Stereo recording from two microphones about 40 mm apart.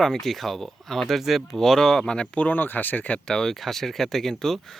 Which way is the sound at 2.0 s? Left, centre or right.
Left.